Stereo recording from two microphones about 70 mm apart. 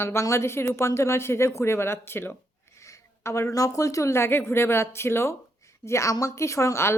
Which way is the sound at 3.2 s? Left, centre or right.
Left.